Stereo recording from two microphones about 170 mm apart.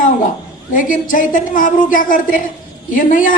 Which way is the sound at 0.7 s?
50° left (ahead or behind).